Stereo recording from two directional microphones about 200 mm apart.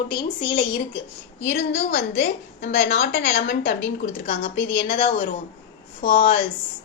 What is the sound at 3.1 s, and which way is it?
Speech, 50° left (ahead or behind).